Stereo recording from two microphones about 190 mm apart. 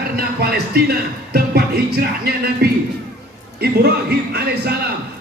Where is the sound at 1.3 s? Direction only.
55° right (ahead or behind).